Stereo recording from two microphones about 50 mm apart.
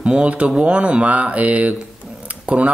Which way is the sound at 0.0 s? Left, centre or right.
Right.